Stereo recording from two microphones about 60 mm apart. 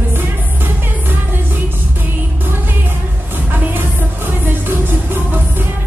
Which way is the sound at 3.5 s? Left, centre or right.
Right.